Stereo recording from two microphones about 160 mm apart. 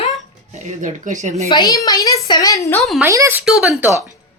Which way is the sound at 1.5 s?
25° left (ahead or behind).